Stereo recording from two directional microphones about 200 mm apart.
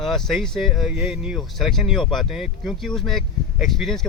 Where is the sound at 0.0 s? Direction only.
Centre (ahead or behind).